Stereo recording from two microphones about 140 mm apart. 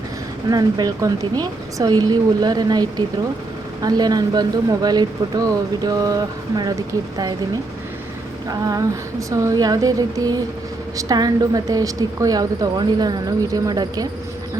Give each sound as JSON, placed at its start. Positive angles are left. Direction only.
{"t": 0.5, "sound": "a woman's voice", "side_deg": -30}
{"t": 3.8, "sound": "a woman's voice", "side_deg": -25}